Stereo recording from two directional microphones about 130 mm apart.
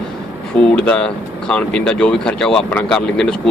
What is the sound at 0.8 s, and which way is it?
Speech, 5° left (ahead or behind).